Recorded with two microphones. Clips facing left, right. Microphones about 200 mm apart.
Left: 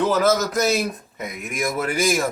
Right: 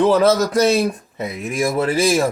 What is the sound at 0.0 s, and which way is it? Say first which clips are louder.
Speech: right 5 dB; 30° right (ahead or behind).